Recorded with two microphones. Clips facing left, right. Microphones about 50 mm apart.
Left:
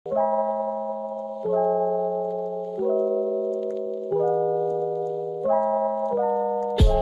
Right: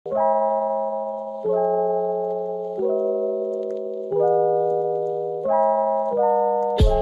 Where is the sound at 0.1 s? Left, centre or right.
Right.